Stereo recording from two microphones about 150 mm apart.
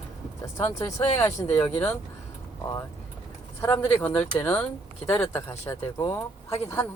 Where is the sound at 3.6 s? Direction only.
15° left (ahead or behind).